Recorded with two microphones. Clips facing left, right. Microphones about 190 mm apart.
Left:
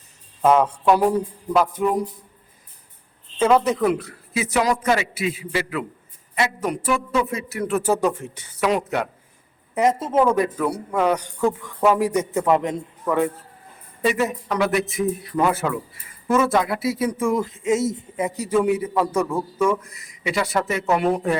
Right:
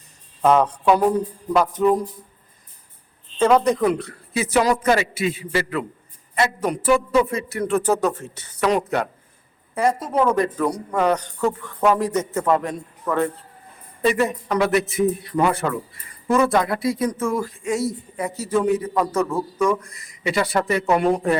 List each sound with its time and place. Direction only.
0.4 s speech: 5° left (ahead or behind)
3.3 s a man's voice: 5° left (ahead or behind)
9.7 s a woman's voice: 20° left (ahead or behind)
10.2 s speech: 5° left (ahead or behind)
14.0 s a man's voice: 5° left (ahead or behind)